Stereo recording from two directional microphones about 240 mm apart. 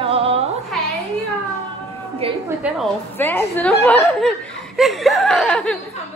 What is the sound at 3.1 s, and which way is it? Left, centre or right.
Speech, centre.